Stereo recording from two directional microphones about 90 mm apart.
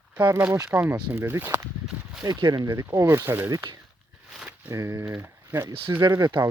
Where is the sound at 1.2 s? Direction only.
25° right (ahead or behind).